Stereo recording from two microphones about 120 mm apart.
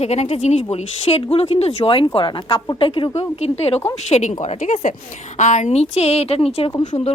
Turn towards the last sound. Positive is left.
turn(degrees=55)  # may be behind; listen again after turning